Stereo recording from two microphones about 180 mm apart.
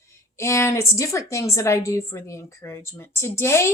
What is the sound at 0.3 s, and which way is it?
A woman's voice, 15° left (ahead or behind).